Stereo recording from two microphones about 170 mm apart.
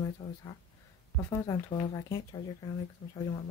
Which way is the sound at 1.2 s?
15° left (ahead or behind).